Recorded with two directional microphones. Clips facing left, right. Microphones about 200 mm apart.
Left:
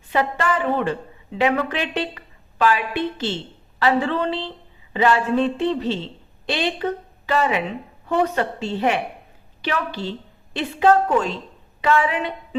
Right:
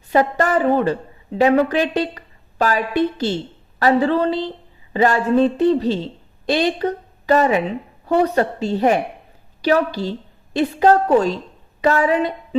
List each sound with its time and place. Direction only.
0.1 s a woman's voice: 40° right (ahead or behind)